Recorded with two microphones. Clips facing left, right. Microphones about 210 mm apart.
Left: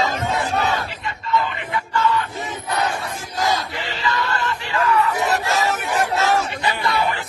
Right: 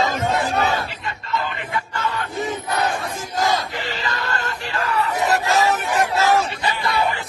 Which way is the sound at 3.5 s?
40° right (ahead or behind).